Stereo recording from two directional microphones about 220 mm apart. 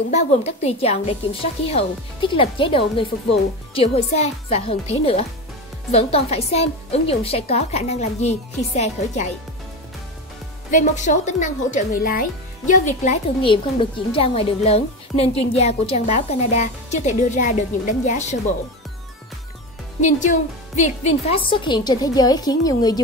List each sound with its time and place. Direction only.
0.1 s a woman's voice: 30° left (ahead or behind)
10.7 s speech: 35° left (ahead or behind)
20.0 s a woman's voice: 35° left (ahead or behind); by 22.9 s 15° left (ahead or behind)